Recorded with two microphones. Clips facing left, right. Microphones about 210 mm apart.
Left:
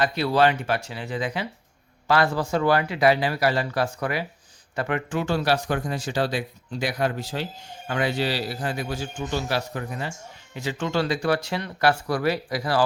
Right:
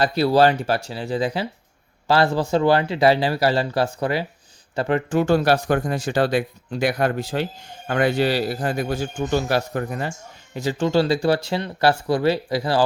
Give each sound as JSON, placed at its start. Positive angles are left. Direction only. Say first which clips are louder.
{"t": 0.0, "sound": "a man's voice", "louder": "right 4 dB", "side_deg": -35}